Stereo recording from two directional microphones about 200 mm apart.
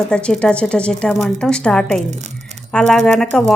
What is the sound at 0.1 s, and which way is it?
Speech, 5° left (ahead or behind).